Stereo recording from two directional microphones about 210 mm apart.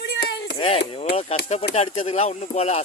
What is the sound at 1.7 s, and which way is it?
Speech, 25° left (ahead or behind).